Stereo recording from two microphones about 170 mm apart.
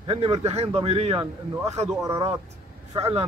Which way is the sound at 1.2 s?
20° right (ahead or behind).